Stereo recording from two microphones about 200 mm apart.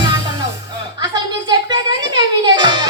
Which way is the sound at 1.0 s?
20° right (ahead or behind).